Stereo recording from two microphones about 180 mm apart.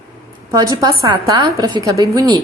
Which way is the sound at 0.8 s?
20° right (ahead or behind).